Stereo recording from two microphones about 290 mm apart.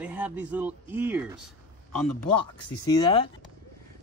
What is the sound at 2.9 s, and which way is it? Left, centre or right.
Speech, centre.